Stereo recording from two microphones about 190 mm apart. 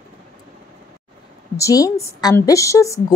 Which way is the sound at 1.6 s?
15° left (ahead or behind).